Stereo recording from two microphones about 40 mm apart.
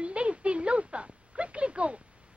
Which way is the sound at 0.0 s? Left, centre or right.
Right.